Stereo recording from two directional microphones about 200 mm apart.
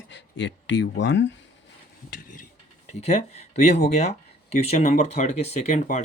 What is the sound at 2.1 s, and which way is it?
Speech, 40° left (ahead or behind).